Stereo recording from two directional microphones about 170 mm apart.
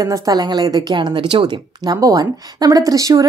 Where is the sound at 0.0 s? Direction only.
20° right (ahead or behind).